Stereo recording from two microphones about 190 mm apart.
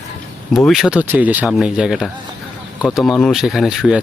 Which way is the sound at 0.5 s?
Centre (ahead or behind).